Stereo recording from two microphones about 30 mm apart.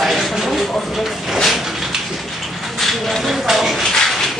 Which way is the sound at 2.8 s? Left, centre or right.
Centre.